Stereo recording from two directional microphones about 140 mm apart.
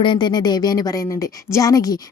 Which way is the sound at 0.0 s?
35° left (ahead or behind).